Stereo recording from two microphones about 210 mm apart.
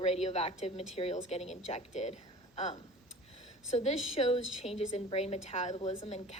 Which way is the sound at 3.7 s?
30° left (ahead or behind).